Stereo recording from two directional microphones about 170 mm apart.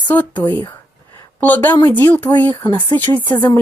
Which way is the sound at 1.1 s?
10° left (ahead or behind).